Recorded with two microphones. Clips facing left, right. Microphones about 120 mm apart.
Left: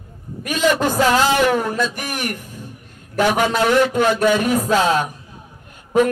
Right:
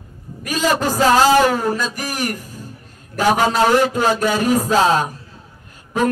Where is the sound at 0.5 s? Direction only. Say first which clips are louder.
Left 1 dB; 35° right (ahead or behind).